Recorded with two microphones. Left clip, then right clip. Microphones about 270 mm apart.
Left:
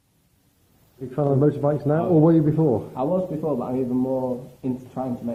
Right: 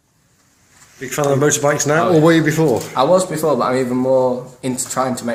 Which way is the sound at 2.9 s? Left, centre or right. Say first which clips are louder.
Right 10 dB; right.